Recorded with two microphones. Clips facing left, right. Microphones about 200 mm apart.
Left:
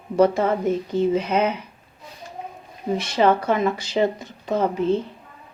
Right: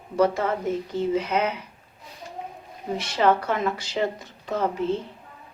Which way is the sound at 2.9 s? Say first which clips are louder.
Left 3 dB; 20° left (ahead or behind).